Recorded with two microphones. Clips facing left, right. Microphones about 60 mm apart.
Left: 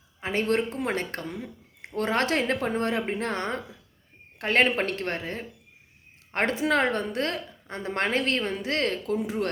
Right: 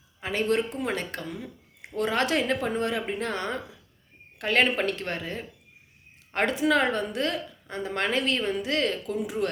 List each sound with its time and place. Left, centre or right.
0.2 s a woman's voice: left